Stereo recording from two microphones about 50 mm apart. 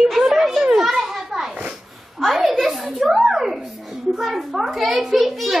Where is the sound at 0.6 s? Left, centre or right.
Centre.